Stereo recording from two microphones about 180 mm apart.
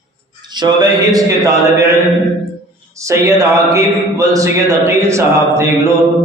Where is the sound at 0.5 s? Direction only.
25° right (ahead or behind).